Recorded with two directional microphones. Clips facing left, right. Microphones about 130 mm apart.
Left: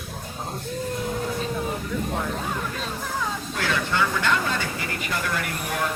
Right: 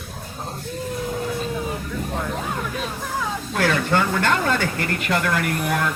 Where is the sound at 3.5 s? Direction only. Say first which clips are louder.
Right 7 dB; 55° right (ahead or behind).